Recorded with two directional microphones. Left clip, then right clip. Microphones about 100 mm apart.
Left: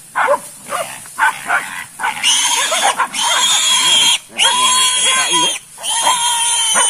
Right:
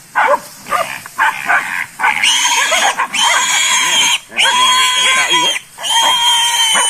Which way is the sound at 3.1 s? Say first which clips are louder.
Right 2 dB; 30° left (ahead or behind).